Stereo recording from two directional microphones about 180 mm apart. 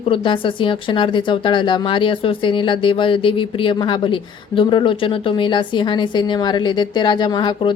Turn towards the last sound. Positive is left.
turn(degrees=25)  # may be behind; listen again after turning